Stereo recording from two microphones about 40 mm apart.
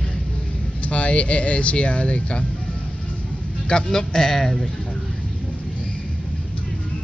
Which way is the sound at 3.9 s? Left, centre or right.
Centre.